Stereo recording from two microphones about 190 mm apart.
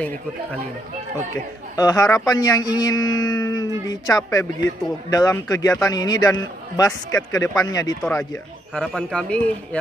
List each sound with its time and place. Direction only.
1.8 s a man's voice: 20° left (ahead or behind)